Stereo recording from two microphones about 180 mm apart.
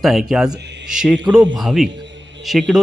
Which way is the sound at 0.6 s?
70° right (ahead or behind).